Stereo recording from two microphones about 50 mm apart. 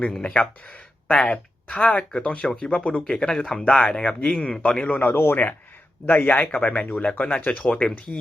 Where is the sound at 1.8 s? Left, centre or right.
Left.